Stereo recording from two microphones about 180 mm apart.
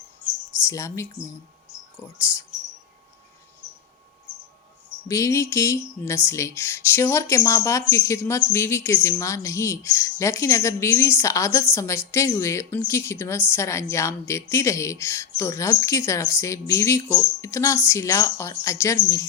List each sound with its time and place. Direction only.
0.6 s speech: 15° left (ahead or behind)
5.0 s speech: 15° left (ahead or behind)